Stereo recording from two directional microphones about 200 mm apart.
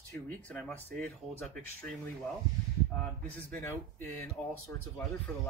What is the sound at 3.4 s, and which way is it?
Speech, 10° left (ahead or behind).